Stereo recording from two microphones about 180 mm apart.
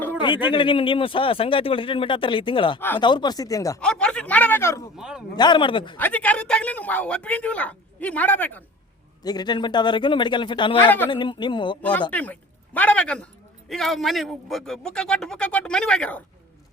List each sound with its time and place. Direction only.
0.4 s a man's voice: 30° left (ahead or behind)
3.8 s speech: 5° left (ahead or behind)
4.9 s speech: 5° right (ahead or behind)
5.4 s a man's voice: 25° left (ahead or behind)
6.0 s speech: 10° left (ahead or behind)
9.2 s a man's voice: 25° left (ahead or behind)
10.8 s speech: 10° left (ahead or behind)
11.1 s a man's voice: 25° left (ahead or behind)
11.8 s speech: 10° left (ahead or behind)